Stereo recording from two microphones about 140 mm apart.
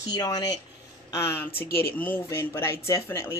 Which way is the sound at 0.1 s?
25° left (ahead or behind).